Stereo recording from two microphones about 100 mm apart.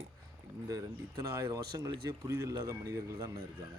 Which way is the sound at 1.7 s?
35° right (ahead or behind).